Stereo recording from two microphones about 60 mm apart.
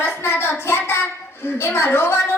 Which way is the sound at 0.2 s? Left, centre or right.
Left.